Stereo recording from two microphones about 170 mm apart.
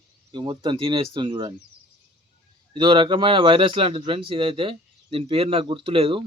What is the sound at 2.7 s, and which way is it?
Speech, 30° right (ahead or behind).